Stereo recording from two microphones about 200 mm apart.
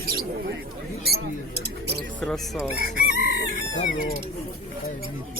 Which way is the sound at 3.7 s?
35° left (ahead or behind).